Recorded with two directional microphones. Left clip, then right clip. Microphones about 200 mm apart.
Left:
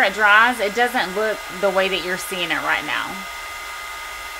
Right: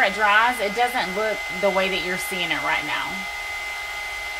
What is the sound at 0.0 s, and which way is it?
Speech, 30° left (ahead or behind).